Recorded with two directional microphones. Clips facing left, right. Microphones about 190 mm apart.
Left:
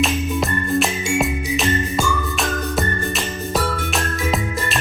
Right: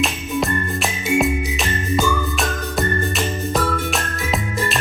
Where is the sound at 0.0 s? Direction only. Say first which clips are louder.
Left 1 dB; centre (ahead or behind).